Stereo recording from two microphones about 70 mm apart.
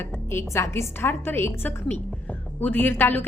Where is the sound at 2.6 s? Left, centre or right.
Left.